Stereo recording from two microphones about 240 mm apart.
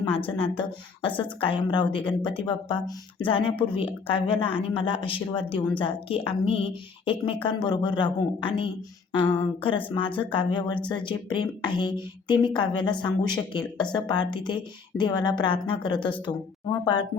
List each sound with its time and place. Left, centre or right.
0.1 s speech: left